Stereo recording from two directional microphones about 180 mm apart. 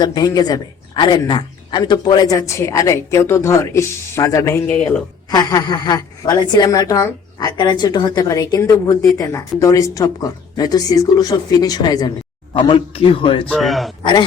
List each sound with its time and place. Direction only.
0.0 s speech: 20° left (ahead or behind); by 5.0 s 5° left (ahead or behind)
5.3 s a woman's voice: 20° left (ahead or behind)
13.5 s a man's voice: centre (ahead or behind)
14.0 s speech: 25° left (ahead or behind)